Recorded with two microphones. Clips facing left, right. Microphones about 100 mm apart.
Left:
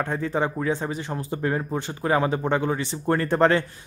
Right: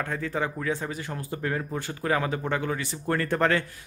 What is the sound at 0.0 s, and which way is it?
Speech, 25° left (ahead or behind).